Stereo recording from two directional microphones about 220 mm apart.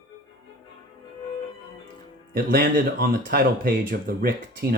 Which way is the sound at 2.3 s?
40° right (ahead or behind).